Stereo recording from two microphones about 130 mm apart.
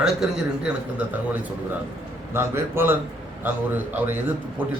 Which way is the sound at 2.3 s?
20° right (ahead or behind).